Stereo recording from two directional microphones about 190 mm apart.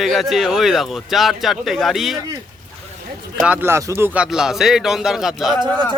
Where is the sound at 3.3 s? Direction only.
5° right (ahead or behind).